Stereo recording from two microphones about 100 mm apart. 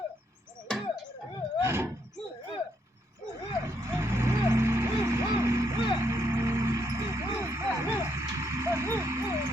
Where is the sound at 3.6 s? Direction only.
30° right (ahead or behind).